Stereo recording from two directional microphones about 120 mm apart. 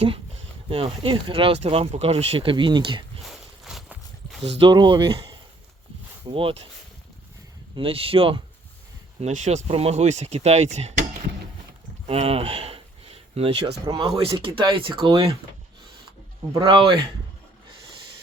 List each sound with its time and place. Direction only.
0.7 s speech: 50° right (ahead or behind)
3.2 s walk: centre (ahead or behind)
4.4 s speech: 50° right (ahead or behind)
7.8 s speech: 50° right (ahead or behind)
9.2 s speech: 75° right (ahead or behind)
12.0 s a sound: 55° right (ahead or behind)
14.4 s speech: 45° right (ahead or behind)
16.6 s speech: 45° right (ahead or behind)